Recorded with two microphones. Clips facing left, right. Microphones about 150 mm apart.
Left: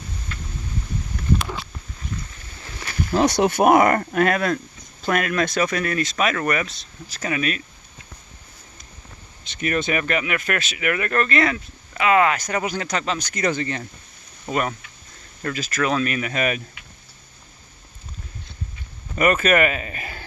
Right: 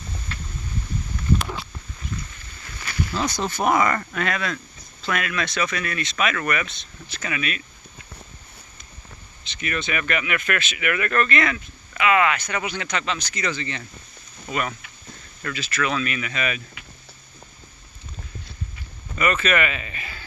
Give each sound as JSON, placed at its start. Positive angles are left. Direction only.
{"t": 3.1, "sound": "speech", "side_deg": 65}
{"t": 4.0, "sound": "speech", "side_deg": 50}
{"t": 9.4, "sound": "speech", "side_deg": 45}
{"t": 14.4, "sound": "speech", "side_deg": 35}
{"t": 19.1, "sound": "speech", "side_deg": 50}